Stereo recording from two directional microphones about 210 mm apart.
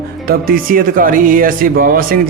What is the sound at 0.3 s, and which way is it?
A man's voice, 45° right (ahead or behind).